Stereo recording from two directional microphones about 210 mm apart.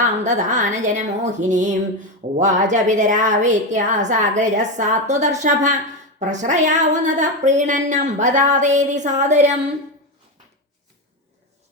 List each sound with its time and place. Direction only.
0.0 s speech: 35° right (ahead or behind)